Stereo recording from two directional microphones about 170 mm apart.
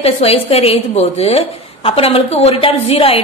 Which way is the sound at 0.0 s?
35° left (ahead or behind).